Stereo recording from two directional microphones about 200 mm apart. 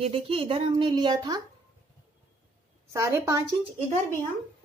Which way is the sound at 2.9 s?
15° right (ahead or behind).